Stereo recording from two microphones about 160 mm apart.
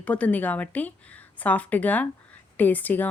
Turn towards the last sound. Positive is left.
turn(degrees=10)  # may be behind; listen again after turning